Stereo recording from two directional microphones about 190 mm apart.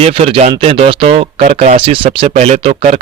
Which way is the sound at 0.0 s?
30° right (ahead or behind).